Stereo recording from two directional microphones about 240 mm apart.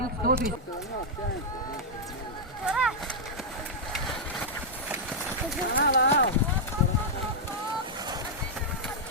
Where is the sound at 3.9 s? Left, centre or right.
Centre.